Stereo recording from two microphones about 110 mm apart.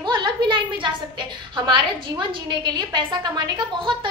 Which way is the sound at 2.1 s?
40° right (ahead or behind).